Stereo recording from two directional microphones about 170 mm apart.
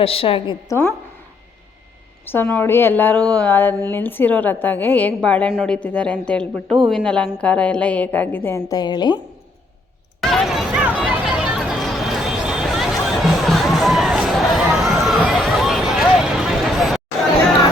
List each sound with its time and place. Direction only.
0.0 s a woman's voice: 35° left (ahead or behind)
0.7 s a woman's voice: 20° left (ahead or behind)
2.2 s a woman's voice: 10° left (ahead or behind)
10.2 s music: centre (ahead or behind)